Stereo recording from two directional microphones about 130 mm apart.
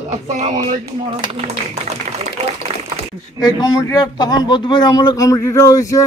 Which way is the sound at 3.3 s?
30° left (ahead or behind).